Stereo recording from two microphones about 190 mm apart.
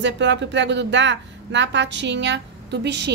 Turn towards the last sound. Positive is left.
turn(degrees=-65)  # may be behind; listen again after turning